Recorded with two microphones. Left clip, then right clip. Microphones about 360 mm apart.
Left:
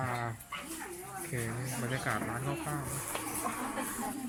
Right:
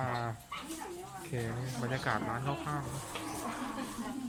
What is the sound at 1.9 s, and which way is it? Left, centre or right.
Speech, centre.